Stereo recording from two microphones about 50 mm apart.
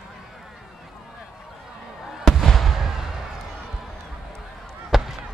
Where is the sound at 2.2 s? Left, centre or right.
Centre.